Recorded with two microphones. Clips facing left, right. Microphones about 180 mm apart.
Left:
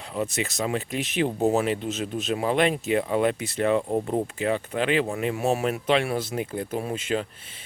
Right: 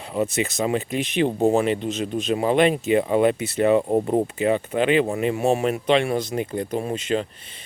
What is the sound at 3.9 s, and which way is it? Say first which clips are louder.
Speech: right 5 dB; 20° right (ahead or behind).